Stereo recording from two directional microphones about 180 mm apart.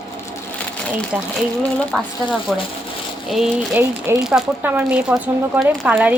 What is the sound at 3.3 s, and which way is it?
Speech, 5° right (ahead or behind).